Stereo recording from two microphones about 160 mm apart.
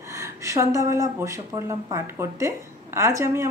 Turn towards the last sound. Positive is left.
turn(degrees=-20)  # may be behind; listen again after turning